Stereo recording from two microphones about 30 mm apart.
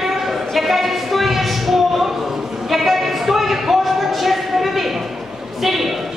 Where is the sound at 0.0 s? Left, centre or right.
Centre.